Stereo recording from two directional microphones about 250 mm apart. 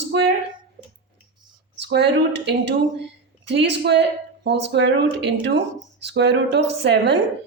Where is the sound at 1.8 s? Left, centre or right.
Right.